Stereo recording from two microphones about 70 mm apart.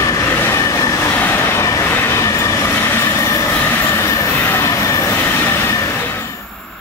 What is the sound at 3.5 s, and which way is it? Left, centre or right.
Train, left.